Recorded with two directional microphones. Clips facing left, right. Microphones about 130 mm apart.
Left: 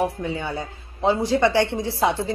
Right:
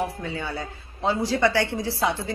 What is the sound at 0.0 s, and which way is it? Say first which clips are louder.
A woman's voice: left 4 dB; 20° left (ahead or behind).